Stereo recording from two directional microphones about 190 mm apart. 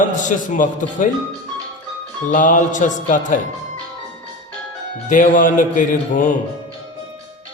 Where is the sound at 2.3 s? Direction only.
45° left (ahead or behind).